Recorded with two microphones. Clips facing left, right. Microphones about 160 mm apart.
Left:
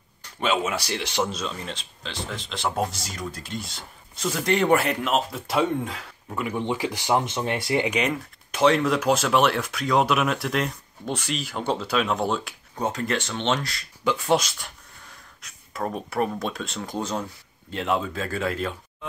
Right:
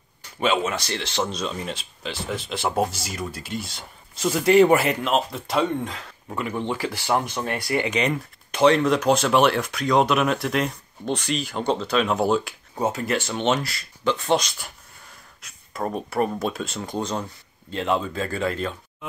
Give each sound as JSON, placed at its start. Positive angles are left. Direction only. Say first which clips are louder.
{"t": 0.4, "sound": "speech", "louder": "right 2 dB", "side_deg": 5}
{"t": 8.0, "sound": "speech", "louder": "right 2 dB", "side_deg": 5}
{"t": 14.0, "sound": "speech", "louder": "even", "side_deg": 5}